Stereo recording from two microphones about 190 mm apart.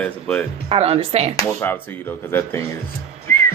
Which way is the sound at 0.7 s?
30° right (ahead or behind).